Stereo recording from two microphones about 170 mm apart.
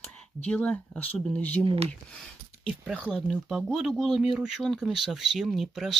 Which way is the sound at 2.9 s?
5° left (ahead or behind).